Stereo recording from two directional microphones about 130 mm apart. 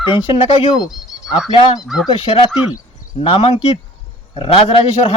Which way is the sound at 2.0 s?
45° left (ahead or behind).